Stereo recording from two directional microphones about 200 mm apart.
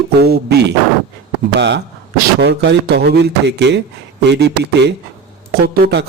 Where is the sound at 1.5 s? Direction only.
60° right (ahead or behind).